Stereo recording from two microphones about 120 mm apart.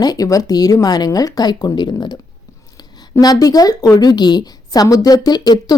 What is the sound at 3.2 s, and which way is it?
Speech, 30° left (ahead or behind).